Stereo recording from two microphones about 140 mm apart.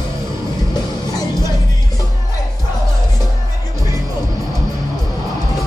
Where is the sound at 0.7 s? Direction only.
30° left (ahead or behind).